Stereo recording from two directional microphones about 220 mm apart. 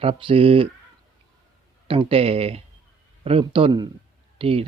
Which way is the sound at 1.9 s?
25° right (ahead or behind).